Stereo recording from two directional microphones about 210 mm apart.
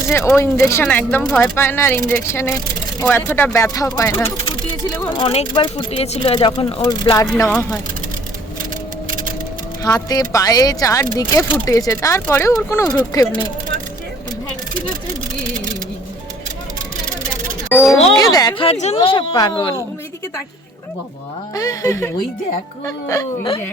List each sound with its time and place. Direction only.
0.1 s speech: 15° left (ahead or behind)
5.1 s speech: 25° left (ahead or behind); by 7.8 s 10° left (ahead or behind)
9.8 s speech: 15° left (ahead or behind)
17.7 s speech: 10° left (ahead or behind)
21.5 s speech: 15° left (ahead or behind)